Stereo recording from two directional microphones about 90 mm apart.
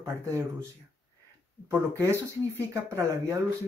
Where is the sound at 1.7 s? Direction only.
30° right (ahead or behind).